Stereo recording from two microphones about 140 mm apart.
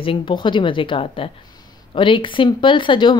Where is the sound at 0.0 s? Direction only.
40° left (ahead or behind).